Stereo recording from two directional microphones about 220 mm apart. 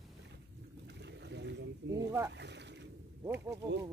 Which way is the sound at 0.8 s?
50° right (ahead or behind).